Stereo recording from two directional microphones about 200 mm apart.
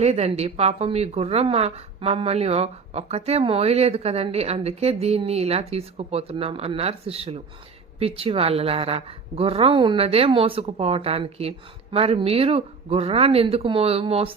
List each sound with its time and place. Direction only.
0.0 s a woman's voice: 35° right (ahead or behind)